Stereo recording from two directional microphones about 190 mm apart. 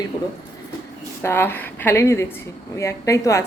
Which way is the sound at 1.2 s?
10° left (ahead or behind).